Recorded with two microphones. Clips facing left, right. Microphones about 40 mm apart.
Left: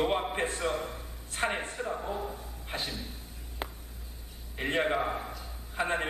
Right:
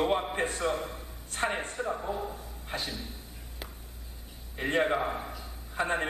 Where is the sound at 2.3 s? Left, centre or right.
Centre.